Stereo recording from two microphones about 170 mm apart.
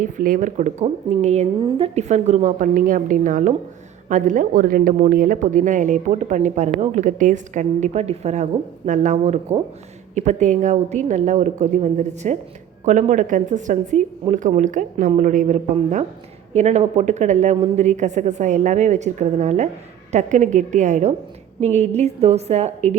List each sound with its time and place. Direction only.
0.0 s a woman's voice: 50° right (ahead or behind)